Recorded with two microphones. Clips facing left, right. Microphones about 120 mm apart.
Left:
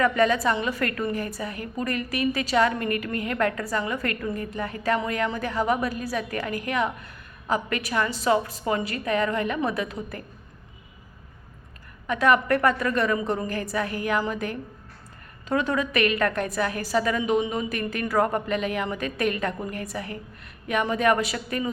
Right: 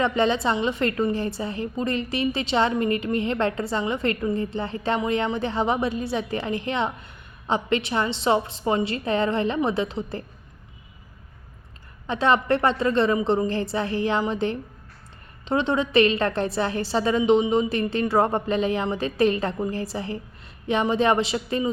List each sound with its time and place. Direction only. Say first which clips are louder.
0.0 s a woman's voice: even; 25° right (ahead or behind)
12.0 s a woman's voice: even; 25° right (ahead or behind)